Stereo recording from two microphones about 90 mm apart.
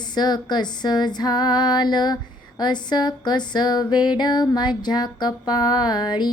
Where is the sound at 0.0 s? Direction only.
55° left (ahead or behind).